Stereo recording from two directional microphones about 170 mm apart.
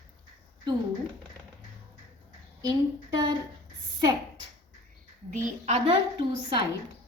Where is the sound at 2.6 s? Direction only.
20° right (ahead or behind).